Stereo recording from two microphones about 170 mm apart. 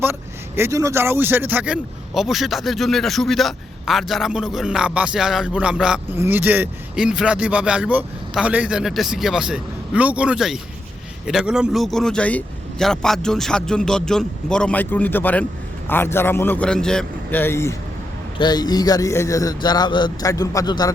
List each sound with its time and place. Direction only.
0.0 s a man's voice: 15° right (ahead or behind); by 20.9 s 20° left (ahead or behind)